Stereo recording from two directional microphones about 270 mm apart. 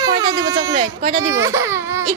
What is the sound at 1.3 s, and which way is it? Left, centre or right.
Baby cry, centre.